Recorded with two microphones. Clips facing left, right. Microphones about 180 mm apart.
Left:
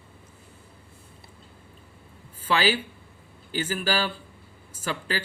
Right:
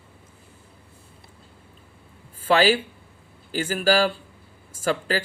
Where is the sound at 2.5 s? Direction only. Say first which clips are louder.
Right 5 dB; 40° right (ahead or behind).